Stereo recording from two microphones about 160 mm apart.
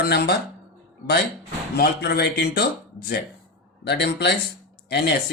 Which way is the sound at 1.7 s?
80° left.